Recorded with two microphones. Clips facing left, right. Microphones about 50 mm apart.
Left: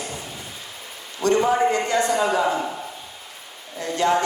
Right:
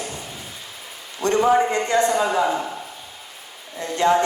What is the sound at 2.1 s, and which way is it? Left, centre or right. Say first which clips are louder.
Speech: even; centre.